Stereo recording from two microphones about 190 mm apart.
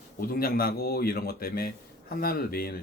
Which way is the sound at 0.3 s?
50° left (ahead or behind).